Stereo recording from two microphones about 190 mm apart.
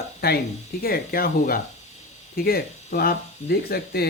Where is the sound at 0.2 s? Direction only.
55° left (ahead or behind).